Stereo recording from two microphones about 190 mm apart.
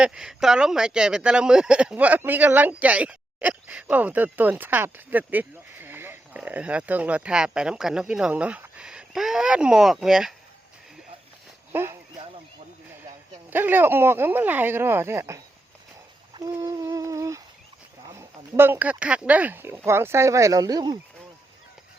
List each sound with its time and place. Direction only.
0.0 s speech: 5° right (ahead or behind)
11.7 s speech: 10° right (ahead or behind)
13.5 s speech: 10° right (ahead or behind)
16.3 s humming: 15° right (ahead or behind)
18.1 s speech: 15° right (ahead or behind)